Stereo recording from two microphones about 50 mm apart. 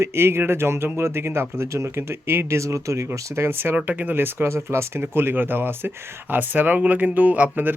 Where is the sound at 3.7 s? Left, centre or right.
Right.